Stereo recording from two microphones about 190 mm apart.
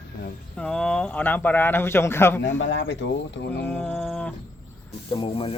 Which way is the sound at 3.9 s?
Centre (ahead or behind).